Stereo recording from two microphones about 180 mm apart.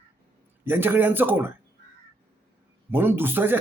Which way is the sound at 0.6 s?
10° right (ahead or behind).